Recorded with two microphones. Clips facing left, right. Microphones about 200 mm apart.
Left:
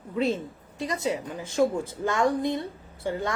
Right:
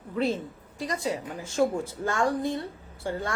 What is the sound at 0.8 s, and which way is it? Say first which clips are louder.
A woman's voice: left 2 dB; 25° left (ahead or behind).